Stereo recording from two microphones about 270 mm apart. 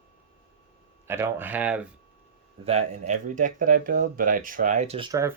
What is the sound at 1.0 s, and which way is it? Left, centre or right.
Speech, centre.